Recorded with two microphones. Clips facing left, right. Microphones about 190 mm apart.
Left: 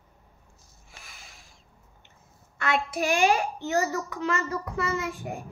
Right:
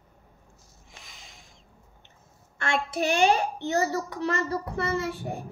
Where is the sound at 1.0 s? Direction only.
20° right (ahead or behind).